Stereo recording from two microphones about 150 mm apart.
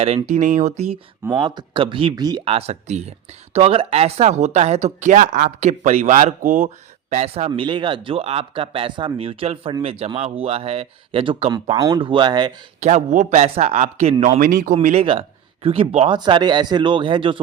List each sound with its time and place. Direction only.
0.3 s speech: 55° right (ahead or behind)
1.4 s speech: 30° right (ahead or behind)
2.4 s speech: 40° right (ahead or behind); by 6.7 s 60° right (ahead or behind)
7.1 s speech: 45° right (ahead or behind); by 12.5 s 30° right (ahead or behind)
12.8 s speech: 50° right (ahead or behind)
15.0 s speech: 35° right (ahead or behind)
16.1 s speech: 30° right (ahead or behind)